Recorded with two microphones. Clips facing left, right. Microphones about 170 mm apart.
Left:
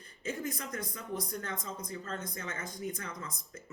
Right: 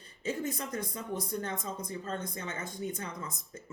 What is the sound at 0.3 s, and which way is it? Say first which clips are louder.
Speech: right 3 dB; 30° right (ahead or behind).